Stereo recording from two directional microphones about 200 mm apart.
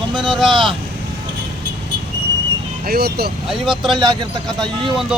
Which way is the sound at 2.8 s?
50° right (ahead or behind).